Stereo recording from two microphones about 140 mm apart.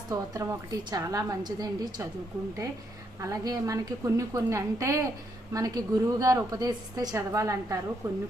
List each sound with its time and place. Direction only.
0.1 s a woman's voice: 25° right (ahead or behind)
3.2 s a woman's voice: 25° right (ahead or behind)